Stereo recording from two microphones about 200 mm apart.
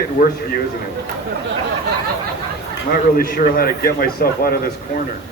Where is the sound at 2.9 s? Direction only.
45° left (ahead or behind).